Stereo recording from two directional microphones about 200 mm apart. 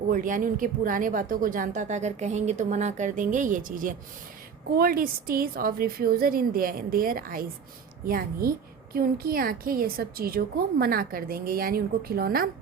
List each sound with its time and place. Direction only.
0.1 s a woman's voice: 40° right (ahead or behind)